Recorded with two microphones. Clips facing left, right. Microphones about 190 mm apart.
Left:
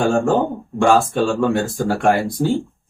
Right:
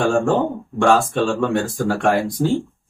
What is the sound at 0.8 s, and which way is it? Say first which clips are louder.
Speech: left 1 dB; centre (ahead or behind).